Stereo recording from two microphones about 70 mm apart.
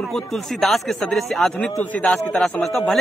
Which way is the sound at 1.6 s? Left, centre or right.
Centre.